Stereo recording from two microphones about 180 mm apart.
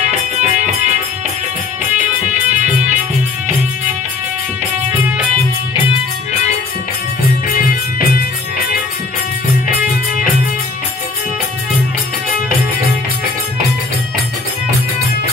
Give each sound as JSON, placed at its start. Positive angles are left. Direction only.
{"t": 0.0, "sound": "music", "side_deg": -40}
{"t": 2.0, "sound": "music", "side_deg": -45}